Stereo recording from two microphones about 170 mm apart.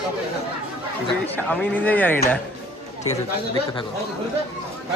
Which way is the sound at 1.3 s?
10° left (ahead or behind).